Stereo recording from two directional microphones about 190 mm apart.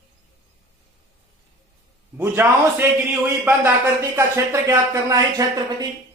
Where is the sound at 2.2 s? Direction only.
10° right (ahead or behind).